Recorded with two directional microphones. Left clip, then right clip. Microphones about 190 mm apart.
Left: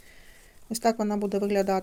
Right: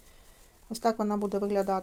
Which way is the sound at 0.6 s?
15° left (ahead or behind).